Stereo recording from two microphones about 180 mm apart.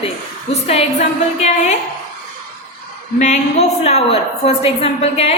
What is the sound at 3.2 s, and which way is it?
A woman's voice, 40° left (ahead or behind).